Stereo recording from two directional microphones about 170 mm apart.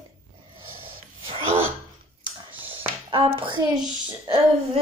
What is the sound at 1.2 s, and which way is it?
Speech, 35° right (ahead or behind).